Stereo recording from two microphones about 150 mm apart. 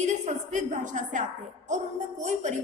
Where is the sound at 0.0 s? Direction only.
50° right (ahead or behind).